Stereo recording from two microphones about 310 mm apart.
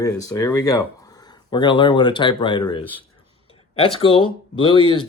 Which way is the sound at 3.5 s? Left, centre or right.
Centre.